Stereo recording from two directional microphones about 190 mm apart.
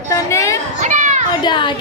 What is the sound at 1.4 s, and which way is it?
Speech, 25° left (ahead or behind).